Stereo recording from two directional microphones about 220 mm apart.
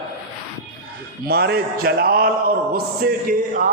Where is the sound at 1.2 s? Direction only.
45° right (ahead or behind).